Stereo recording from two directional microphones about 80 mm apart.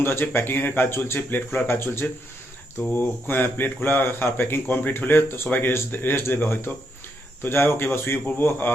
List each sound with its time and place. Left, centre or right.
0.0 s speech: left